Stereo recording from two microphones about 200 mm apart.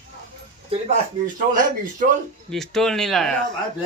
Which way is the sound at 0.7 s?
30° right (ahead or behind).